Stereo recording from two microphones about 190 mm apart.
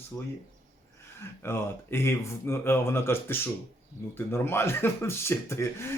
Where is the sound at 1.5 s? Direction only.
10° left (ahead or behind).